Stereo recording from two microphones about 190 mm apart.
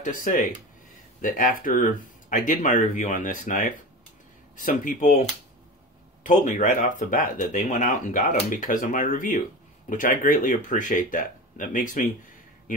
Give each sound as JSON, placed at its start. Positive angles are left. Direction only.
{"t": 0.0, "sound": "speech", "side_deg": 45}
{"t": 6.2, "sound": "speech", "side_deg": 40}